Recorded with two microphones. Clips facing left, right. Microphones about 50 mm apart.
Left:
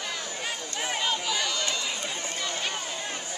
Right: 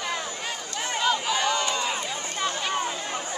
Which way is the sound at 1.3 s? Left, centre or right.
Right.